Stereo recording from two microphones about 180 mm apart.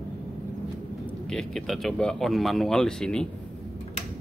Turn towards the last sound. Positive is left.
turn(degrees=5)  # may be behind; listen again after turning